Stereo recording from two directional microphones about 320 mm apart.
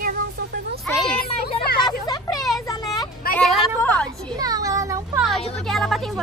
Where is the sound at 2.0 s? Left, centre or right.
Centre.